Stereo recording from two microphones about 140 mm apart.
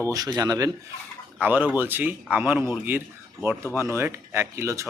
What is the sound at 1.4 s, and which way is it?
Speech, 15° right (ahead or behind).